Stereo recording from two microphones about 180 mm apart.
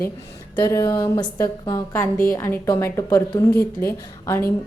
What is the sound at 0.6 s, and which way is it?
A woman's voice, 15° left (ahead or behind).